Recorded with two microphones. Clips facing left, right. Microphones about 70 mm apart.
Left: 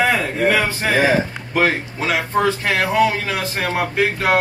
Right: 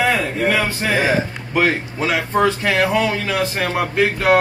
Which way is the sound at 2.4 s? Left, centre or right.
Centre.